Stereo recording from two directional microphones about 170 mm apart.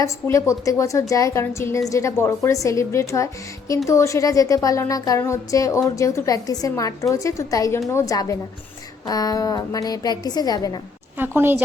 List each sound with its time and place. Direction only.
0.0 s a woman's voice: 15° left (ahead or behind)
11.2 s a woman's voice: 10° right (ahead or behind)